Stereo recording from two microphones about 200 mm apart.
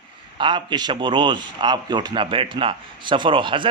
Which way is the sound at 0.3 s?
25° right (ahead or behind).